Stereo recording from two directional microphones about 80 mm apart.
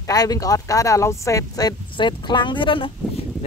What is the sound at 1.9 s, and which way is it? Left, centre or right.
Speech, left.